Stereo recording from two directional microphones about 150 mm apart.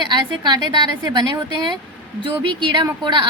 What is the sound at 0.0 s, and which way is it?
A woman's voice, 30° right (ahead or behind).